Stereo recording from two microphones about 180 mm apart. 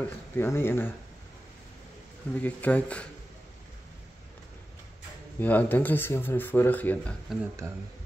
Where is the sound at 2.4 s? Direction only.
10° left (ahead or behind).